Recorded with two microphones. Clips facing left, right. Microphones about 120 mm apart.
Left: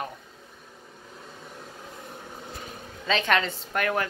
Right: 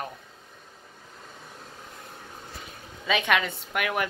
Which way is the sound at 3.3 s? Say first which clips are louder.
Left 1 dB; 10° right (ahead or behind).